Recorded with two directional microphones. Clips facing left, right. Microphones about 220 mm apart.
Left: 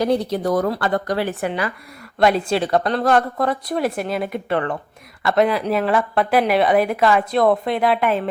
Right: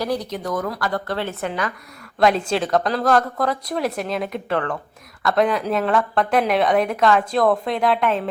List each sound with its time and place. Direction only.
0.0 s a woman's voice: 25° left (ahead or behind); by 8.2 s 5° left (ahead or behind)